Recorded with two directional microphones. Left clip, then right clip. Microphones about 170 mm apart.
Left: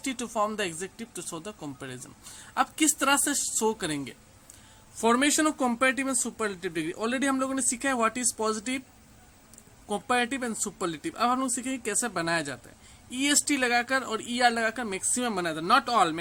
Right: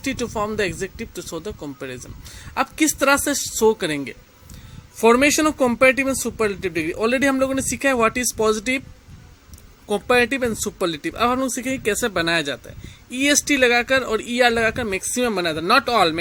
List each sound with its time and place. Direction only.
0.0 s speech: 15° right (ahead or behind)
9.9 s speech: 25° right (ahead or behind)